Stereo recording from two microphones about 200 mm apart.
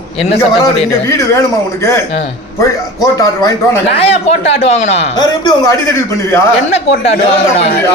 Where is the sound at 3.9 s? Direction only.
30° left (ahead or behind).